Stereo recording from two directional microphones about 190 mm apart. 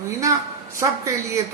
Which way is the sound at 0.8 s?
15° right (ahead or behind).